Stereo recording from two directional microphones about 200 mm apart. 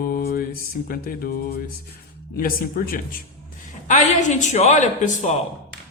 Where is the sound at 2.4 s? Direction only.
45° left (ahead or behind).